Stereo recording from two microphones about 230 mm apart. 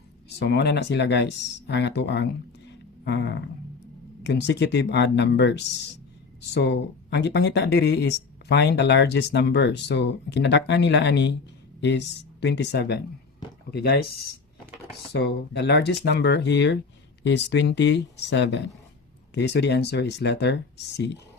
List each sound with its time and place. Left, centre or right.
0.3 s speech: left
3.0 s a sound: left
4.2 s speech: left
15.1 s speech: left